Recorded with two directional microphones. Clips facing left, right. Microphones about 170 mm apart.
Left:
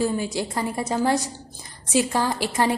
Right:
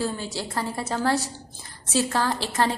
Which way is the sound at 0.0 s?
15° left (ahead or behind).